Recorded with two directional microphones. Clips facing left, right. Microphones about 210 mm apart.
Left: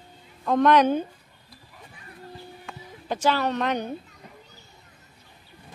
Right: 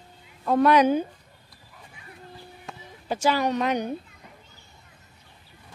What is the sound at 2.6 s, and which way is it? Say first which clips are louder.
Music: right 1 dB; 10° right (ahead or behind).